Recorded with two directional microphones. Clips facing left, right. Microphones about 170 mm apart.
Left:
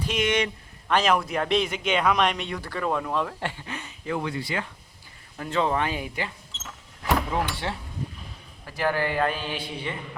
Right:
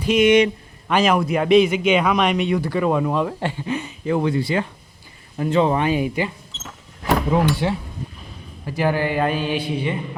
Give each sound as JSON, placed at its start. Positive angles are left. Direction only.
{"t": 0.0, "sound": "a man's voice", "side_deg": -10}